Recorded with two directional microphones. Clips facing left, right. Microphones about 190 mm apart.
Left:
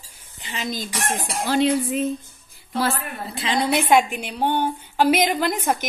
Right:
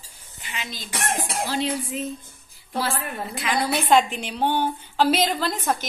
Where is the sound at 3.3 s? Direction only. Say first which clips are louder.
Left 3 dB; 30° left (ahead or behind).